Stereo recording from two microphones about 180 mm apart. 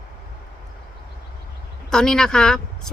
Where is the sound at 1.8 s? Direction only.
5° left (ahead or behind).